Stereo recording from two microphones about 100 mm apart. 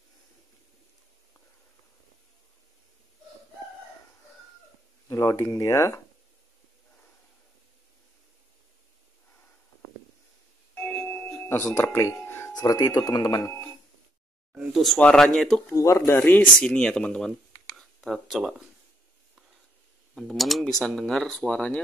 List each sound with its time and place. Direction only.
5.0 s speech: 30° left (ahead or behind)
10.8 s doorbell: 5° left (ahead or behind)
11.4 s music: 25° left (ahead or behind)
12.5 s speech: 35° left (ahead or behind)
13.4 s speech: 25° left (ahead or behind)
14.5 s a sound: 5° right (ahead or behind)
15.0 s speech: 10° left (ahead or behind)
15.7 s speech: 30° left (ahead or behind)
16.6 s speech: 10° left (ahead or behind)
17.7 s a sound: centre (ahead or behind)
20.2 s speech: centre (ahead or behind)